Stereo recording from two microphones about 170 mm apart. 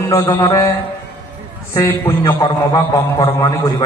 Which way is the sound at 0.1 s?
25° left (ahead or behind).